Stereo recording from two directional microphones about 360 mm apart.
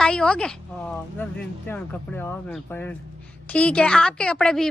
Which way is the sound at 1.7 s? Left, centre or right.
Centre.